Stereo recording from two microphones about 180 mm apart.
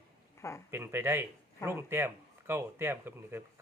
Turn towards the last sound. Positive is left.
turn(degrees=-10)  # may be behind; listen again after turning